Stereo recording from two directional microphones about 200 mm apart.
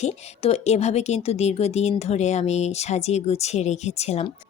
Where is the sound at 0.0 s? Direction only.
30° left (ahead or behind).